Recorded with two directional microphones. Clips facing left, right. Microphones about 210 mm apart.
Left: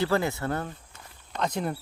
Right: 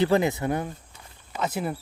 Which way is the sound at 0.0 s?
20° right (ahead or behind).